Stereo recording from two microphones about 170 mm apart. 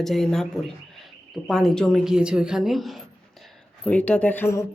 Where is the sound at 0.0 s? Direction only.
Centre (ahead or behind).